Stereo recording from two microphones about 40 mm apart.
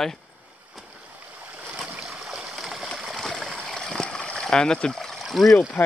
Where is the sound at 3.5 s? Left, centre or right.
Centre.